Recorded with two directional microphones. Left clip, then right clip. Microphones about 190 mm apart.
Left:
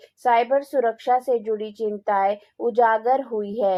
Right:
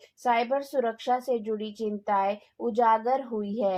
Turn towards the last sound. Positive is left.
turn(degrees=40)  # may be behind; listen again after turning